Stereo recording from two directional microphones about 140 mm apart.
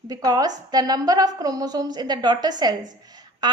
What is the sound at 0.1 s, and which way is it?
A woman's voice, 25° right (ahead or behind).